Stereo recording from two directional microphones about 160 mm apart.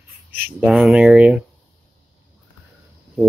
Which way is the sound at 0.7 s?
Centre (ahead or behind).